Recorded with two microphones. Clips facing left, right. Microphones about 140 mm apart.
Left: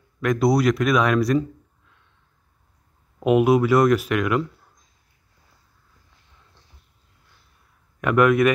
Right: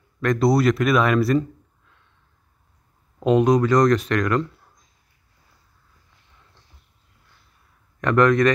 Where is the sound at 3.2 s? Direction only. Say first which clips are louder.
Even; 10° left (ahead or behind).